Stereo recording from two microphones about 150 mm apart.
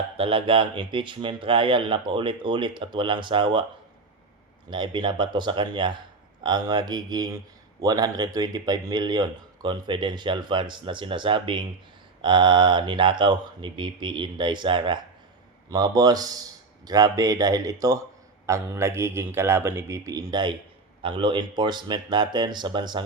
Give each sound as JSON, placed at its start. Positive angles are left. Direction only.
{"t": 0.2, "sound": "speech", "side_deg": -35}
{"t": 4.7, "sound": "a man's voice", "side_deg": -30}